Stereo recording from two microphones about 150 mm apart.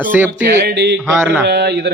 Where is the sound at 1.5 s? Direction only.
90° right.